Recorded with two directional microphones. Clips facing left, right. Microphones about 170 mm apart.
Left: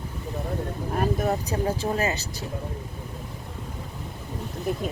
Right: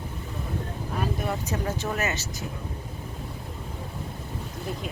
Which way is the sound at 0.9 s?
45° left (ahead or behind).